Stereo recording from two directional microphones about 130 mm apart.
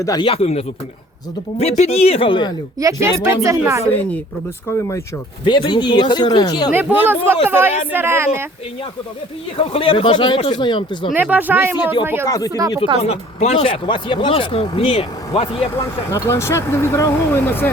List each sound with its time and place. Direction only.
0.0 s speech: 30° left (ahead or behind)
0.3 s speech: 50° left (ahead or behind)
2.7 s a woman's voice: 25° right (ahead or behind)
5.5 s speech: 40° left (ahead or behind)
6.7 s a woman's voice: 15° right (ahead or behind)
9.6 s speech: 45° left (ahead or behind)
11.1 s speech: 15° right (ahead or behind)
13.0 s speech: 55° left (ahead or behind)
16.1 s speech: 25° left (ahead or behind)